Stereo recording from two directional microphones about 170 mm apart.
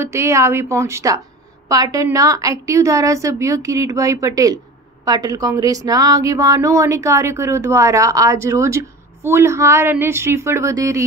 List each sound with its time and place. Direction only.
0.0 s a woman's voice: 15° right (ahead or behind)